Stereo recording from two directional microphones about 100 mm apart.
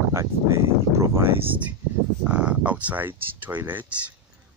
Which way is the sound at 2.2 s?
10° right (ahead or behind).